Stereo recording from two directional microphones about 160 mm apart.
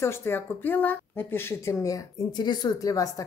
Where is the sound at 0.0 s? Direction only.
15° left (ahead or behind).